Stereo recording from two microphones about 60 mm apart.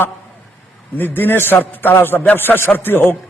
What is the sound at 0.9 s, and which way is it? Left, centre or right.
A man's voice, left.